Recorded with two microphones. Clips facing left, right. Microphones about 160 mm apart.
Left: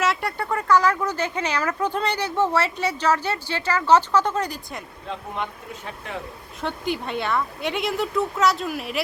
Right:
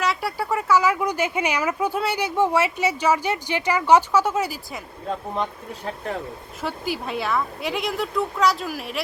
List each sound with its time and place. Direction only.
0.0 s speech: centre (ahead or behind)
5.0 s speech: 35° right (ahead or behind)
6.6 s speech: 5° right (ahead or behind)